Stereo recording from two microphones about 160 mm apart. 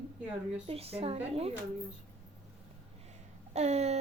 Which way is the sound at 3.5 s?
45° right (ahead or behind).